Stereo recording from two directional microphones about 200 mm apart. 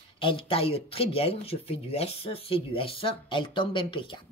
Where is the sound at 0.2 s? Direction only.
25° left (ahead or behind).